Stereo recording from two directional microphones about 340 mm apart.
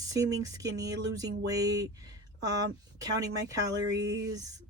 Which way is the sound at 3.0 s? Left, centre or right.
Centre.